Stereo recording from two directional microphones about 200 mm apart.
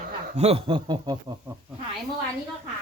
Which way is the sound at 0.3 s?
30° right (ahead or behind).